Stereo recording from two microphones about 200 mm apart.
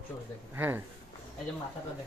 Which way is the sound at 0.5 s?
10° right (ahead or behind).